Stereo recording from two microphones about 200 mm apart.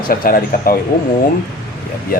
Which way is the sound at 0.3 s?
45° left (ahead or behind).